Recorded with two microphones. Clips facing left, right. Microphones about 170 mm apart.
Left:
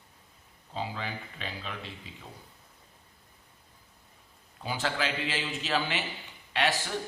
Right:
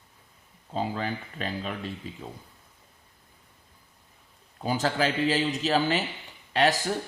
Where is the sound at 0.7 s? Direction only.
45° right (ahead or behind).